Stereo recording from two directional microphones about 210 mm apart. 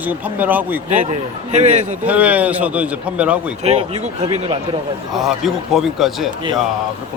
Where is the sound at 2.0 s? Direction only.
5° right (ahead or behind).